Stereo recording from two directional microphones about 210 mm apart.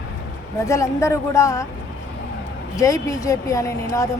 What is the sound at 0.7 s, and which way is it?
Speech, 15° left (ahead or behind).